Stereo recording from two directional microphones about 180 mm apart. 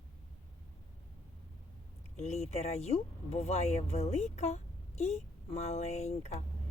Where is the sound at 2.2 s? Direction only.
40° left (ahead or behind).